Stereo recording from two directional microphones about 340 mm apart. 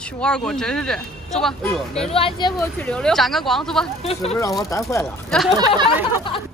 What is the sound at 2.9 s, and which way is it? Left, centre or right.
Speech, centre.